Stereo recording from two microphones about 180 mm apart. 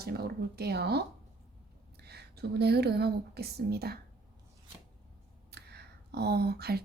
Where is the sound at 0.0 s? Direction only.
60° right (ahead or behind).